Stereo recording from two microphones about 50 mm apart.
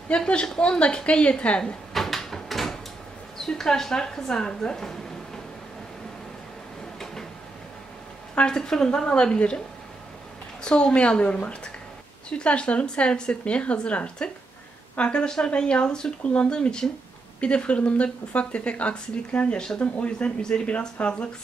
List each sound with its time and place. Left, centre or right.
0.1 s speech: centre
2.0 s a sound: centre
3.3 s speech: centre
8.5 s speech: centre
10.6 s speech: centre